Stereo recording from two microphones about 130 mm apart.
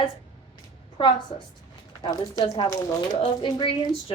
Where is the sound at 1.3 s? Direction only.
45° left (ahead or behind).